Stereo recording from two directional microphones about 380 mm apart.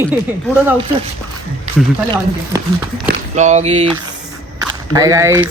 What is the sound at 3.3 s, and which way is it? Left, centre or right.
Speech, centre.